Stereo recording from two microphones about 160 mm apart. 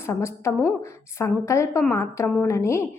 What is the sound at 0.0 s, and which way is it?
A woman's voice, 15° left (ahead or behind).